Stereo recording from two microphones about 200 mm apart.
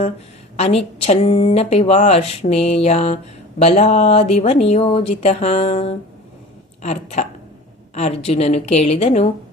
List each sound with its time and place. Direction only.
0.5 s speech: 30° left (ahead or behind)